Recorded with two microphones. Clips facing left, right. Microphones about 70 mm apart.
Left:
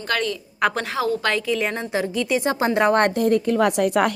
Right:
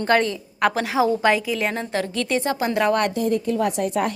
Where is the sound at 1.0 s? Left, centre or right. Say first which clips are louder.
Right 5 dB; centre.